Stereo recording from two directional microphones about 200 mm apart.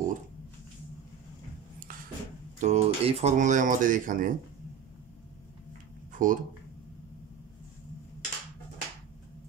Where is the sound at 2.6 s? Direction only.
35° right (ahead or behind).